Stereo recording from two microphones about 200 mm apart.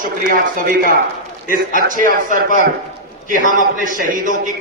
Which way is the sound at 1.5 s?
40° right (ahead or behind).